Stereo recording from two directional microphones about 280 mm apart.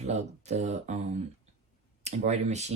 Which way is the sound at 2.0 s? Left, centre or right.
Right.